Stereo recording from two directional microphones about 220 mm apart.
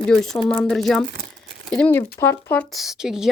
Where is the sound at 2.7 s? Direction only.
Centre (ahead or behind).